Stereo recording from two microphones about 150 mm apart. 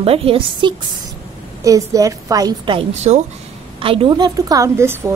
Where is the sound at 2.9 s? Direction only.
50° right (ahead or behind).